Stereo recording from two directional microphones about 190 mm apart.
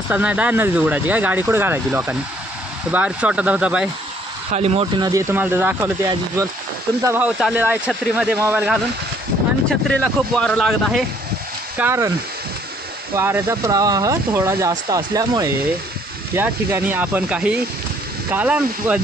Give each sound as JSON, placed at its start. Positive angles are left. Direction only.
{"t": 0.1, "sound": "speech", "side_deg": -5}
{"t": 4.5, "sound": "speech", "side_deg": -35}
{"t": 5.3, "sound": "speech", "side_deg": -10}
{"t": 7.0, "sound": "speech", "side_deg": -15}
{"t": 9.7, "sound": "speech", "side_deg": 5}
{"t": 11.8, "sound": "speech", "side_deg": -15}
{"t": 13.1, "sound": "speech", "side_deg": -15}